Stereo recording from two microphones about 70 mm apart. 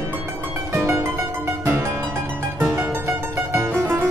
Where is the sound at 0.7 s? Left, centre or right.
Right.